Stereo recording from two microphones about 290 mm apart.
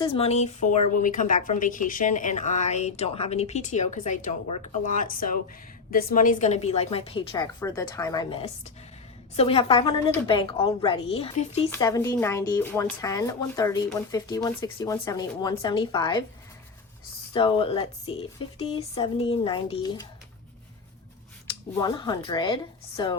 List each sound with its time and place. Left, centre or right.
0.0 s a woman's voice: centre
17.3 s a woman's voice: centre
21.8 s speech: centre